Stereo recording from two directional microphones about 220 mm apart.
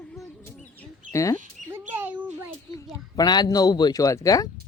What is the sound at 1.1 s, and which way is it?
Speech, 15° left (ahead or behind).